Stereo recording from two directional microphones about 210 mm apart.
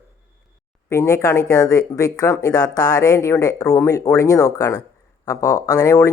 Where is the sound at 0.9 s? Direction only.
15° left (ahead or behind).